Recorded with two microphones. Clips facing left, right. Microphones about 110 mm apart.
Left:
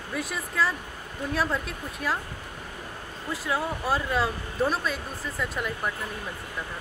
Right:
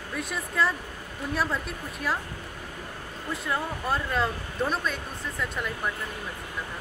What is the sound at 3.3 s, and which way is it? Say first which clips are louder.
Speech: left 2 dB; centre (ahead or behind).